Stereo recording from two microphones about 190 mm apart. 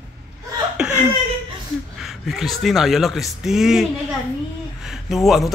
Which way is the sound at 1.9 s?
Centre (ahead or behind).